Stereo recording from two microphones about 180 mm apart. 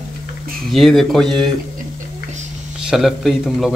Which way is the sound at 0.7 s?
Centre (ahead or behind).